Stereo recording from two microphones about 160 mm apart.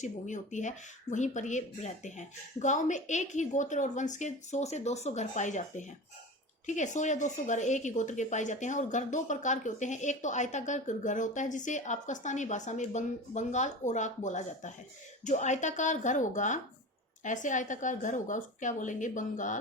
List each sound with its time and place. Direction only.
0.0 s a woman's voice: 50° left (ahead or behind)